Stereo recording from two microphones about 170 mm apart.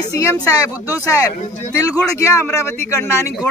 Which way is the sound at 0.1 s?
20° left (ahead or behind).